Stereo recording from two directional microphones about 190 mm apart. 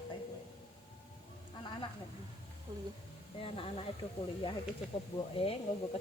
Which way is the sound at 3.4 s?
30° left (ahead or behind).